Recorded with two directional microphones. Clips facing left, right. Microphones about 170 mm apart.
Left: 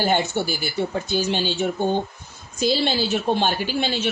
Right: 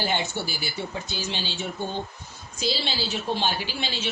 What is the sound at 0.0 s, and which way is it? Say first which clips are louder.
A woman's voice: left 6 dB; 50° left (ahead or behind).